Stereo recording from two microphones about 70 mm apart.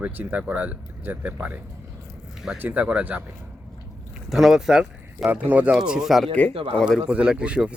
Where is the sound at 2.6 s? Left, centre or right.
Centre.